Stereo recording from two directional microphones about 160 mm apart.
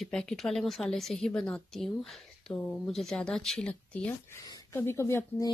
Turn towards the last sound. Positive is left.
turn(degrees=15)  # may be behind; listen again after turning